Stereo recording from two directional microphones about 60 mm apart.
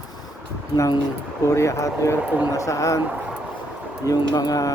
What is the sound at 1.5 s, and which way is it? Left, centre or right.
Speech, left.